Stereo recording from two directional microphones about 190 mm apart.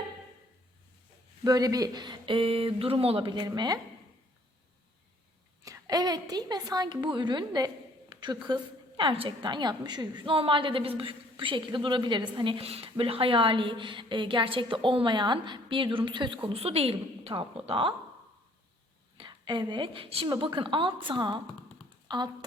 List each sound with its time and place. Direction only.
1.5 s a woman's voice: 20° right (ahead or behind)
5.6 s a woman's voice: 20° right (ahead or behind)
19.1 s a woman's voice: 25° right (ahead or behind)